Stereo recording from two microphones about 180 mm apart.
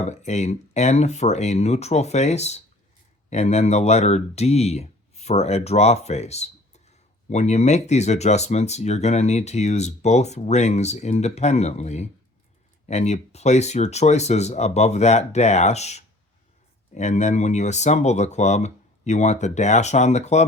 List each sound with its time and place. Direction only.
0.0 s speech: 40° left (ahead or behind)